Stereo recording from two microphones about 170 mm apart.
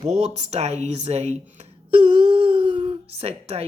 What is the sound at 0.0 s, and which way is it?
A woman's voice, 40° right (ahead or behind).